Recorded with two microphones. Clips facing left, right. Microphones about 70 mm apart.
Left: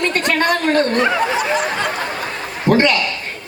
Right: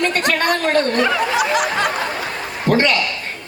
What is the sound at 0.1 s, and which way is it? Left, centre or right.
Speech, left.